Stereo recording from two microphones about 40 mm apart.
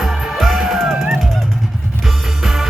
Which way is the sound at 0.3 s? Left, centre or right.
Centre.